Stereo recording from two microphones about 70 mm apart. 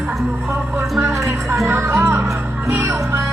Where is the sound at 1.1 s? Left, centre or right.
Right.